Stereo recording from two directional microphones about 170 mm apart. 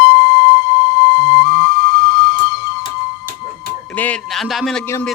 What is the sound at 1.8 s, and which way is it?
Steam whistle, centre (ahead or behind).